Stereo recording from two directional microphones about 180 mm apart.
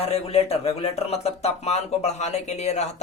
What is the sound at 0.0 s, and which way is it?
Speech, 35° left (ahead or behind).